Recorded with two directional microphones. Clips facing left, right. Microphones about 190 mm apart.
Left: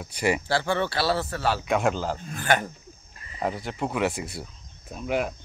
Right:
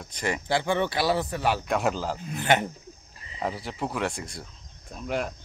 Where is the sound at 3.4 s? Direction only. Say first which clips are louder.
Left 2 dB; centre (ahead or behind).